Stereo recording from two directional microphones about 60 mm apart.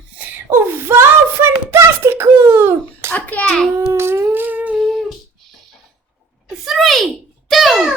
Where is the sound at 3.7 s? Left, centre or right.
Right.